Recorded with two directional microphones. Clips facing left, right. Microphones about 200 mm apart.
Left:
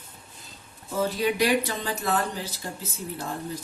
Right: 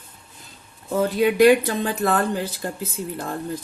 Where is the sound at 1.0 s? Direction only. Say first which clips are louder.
Right 8 dB; 55° right (ahead or behind).